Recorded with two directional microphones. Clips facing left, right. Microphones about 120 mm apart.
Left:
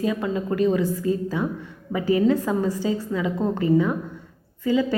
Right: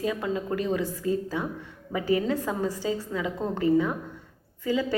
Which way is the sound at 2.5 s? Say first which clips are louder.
Left 5 dB; 35° right (ahead or behind).